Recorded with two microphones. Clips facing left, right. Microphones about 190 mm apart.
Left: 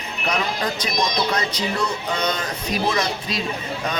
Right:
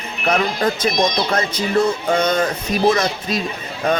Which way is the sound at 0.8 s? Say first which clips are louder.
Right 4 dB; 50° right (ahead or behind).